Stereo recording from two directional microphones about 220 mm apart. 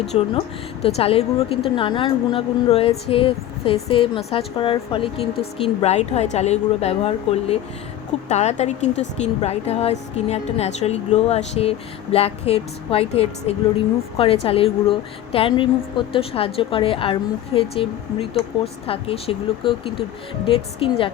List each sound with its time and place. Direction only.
0.1 s a woman's voice: 25° left (ahead or behind)